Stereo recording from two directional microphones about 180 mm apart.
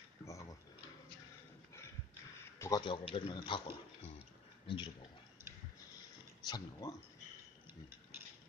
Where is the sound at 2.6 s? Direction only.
20° left (ahead or behind).